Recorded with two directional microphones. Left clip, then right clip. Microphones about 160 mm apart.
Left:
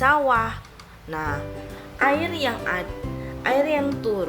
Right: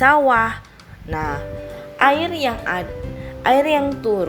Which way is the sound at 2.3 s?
30° right (ahead or behind).